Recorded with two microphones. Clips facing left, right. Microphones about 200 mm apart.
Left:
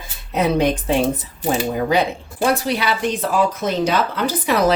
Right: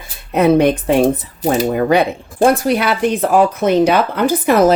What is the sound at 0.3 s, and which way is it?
Speech, 60° right (ahead or behind).